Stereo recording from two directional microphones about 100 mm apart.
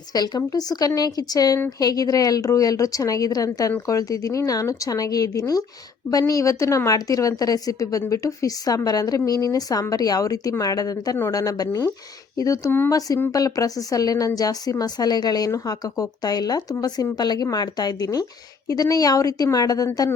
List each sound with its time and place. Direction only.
0.1 s a woman's voice: 40° left (ahead or behind)